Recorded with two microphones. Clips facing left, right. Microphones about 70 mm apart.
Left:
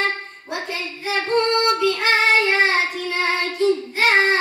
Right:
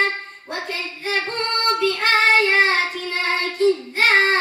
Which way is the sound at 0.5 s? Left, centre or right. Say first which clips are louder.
Left 1 dB; right.